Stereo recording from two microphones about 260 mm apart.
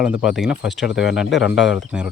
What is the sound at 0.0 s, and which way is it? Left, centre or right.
Speech, centre.